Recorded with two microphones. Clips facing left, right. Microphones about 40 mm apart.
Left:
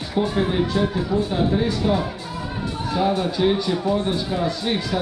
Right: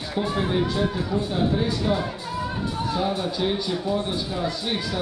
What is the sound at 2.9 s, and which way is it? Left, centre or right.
Speech, centre.